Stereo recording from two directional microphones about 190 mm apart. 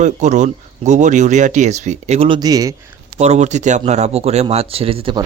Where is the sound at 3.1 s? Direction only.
35° right (ahead or behind).